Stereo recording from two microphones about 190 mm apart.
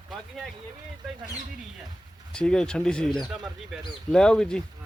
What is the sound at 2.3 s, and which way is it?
A man's voice, 5° left (ahead or behind).